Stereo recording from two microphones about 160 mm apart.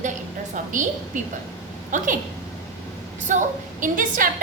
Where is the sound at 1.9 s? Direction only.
55° right (ahead or behind).